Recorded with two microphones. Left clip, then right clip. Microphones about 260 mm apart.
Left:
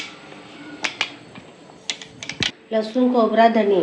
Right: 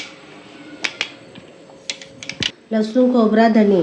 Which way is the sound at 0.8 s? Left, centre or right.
Centre.